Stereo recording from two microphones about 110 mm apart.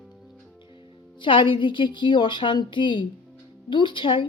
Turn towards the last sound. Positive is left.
turn(degrees=50)  # may be behind; listen again after turning